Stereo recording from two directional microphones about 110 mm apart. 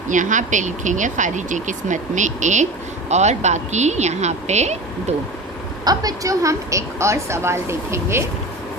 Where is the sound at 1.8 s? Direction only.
90° right.